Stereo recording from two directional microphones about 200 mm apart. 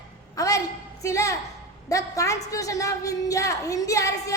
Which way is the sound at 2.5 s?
15° left (ahead or behind).